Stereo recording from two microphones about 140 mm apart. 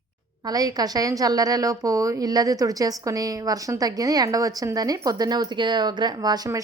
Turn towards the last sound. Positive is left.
turn(degrees=-25)  # may be behind; listen again after turning